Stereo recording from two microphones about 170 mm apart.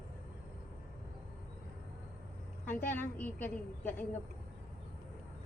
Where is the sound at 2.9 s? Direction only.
10° left (ahead or behind).